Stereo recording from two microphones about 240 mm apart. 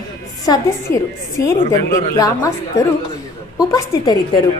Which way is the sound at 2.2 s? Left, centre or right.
Centre.